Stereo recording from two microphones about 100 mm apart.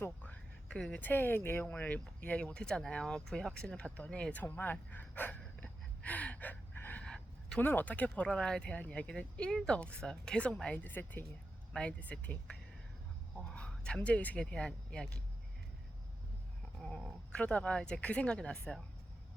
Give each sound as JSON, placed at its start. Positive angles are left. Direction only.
{"t": 0.0, "sound": "speech", "side_deg": 15}
{"t": 5.4, "sound": "gasp", "side_deg": 15}
{"t": 7.0, "sound": "gasp", "side_deg": 10}
{"t": 7.6, "sound": "speech", "side_deg": 20}
{"t": 17.3, "sound": "speech", "side_deg": 10}